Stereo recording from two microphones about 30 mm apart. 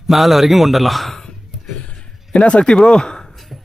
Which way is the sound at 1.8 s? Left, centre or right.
Left.